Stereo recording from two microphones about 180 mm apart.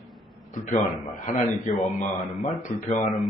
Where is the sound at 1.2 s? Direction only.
40° left (ahead or behind).